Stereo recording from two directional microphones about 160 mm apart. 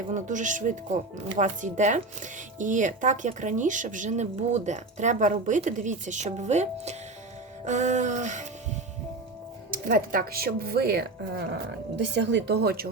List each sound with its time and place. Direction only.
0.1 s speech: 50° right (ahead or behind)
9.7 s speech: 60° right (ahead or behind); by 12.9 s 80° right